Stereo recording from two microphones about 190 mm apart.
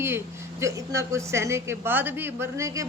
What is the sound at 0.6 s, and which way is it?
A woman's voice, 15° right (ahead or behind).